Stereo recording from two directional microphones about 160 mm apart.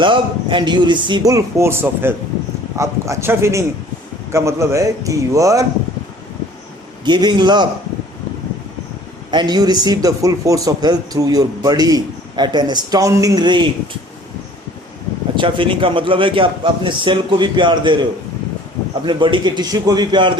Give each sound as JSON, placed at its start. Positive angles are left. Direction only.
{"t": 0.0, "sound": "a man's voice", "side_deg": -30}
{"t": 7.0, "sound": "a man's voice", "side_deg": -25}
{"t": 9.3, "sound": "a man's voice", "side_deg": -25}
{"t": 15.4, "sound": "a man's voice", "side_deg": -30}
{"t": 19.0, "sound": "a man's voice", "side_deg": -30}